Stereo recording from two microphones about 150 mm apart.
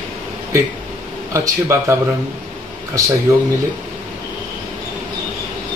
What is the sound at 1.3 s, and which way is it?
Speech, 20° right (ahead or behind).